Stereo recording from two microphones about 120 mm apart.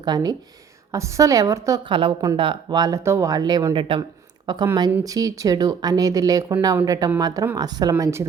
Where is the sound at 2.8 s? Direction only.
25° right (ahead or behind).